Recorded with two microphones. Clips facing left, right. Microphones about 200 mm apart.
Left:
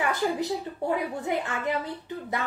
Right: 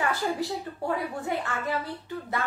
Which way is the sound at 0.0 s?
20° left (ahead or behind).